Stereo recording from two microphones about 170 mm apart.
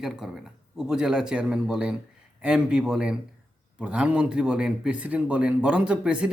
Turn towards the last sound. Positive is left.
turn(degrees=-5)  # may be behind; listen again after turning